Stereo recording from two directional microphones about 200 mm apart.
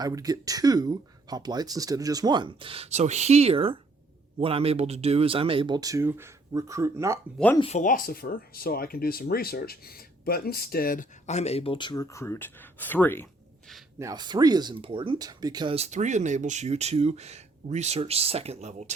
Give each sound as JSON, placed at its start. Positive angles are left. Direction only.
{"t": 0.0, "sound": "speech", "side_deg": -20}
{"t": 7.6, "sound": "speech", "side_deg": 35}
{"t": 14.0, "sound": "speech", "side_deg": -20}